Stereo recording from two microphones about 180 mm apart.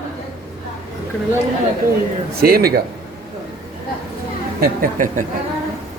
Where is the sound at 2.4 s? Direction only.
55° right (ahead or behind).